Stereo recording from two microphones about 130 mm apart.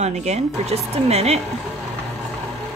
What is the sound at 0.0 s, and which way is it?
Speech, 60° right (ahead or behind).